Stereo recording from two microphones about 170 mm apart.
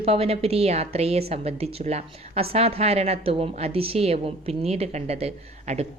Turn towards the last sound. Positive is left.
turn(degrees=-40)  # may be behind; listen again after turning